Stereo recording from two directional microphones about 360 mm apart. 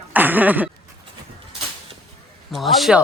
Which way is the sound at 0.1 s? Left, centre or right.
Centre.